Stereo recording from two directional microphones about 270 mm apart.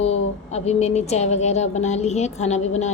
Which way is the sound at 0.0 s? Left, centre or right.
Left.